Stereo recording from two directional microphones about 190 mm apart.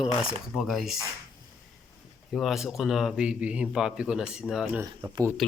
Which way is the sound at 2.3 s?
Centre (ahead or behind).